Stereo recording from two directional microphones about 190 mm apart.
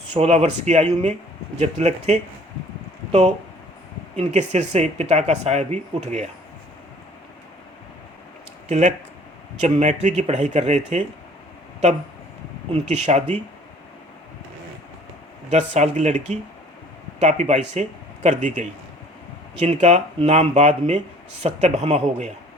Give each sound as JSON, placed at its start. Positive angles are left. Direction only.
{"t": 0.1, "sound": "speech", "side_deg": -35}
{"t": 9.6, "sound": "speech", "side_deg": -35}
{"t": 12.7, "sound": "speech", "side_deg": -35}
{"t": 15.4, "sound": "speech", "side_deg": -40}